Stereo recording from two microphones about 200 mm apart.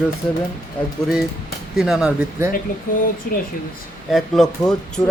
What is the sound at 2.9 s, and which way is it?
Speech, 40° left (ahead or behind).